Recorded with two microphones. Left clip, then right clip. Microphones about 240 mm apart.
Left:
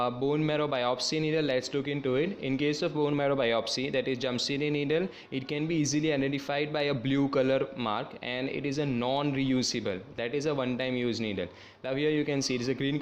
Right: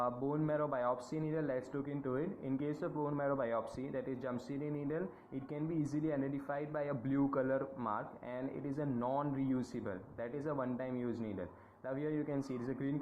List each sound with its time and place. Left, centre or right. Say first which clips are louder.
0.0 s a man's voice: left 8 dB; left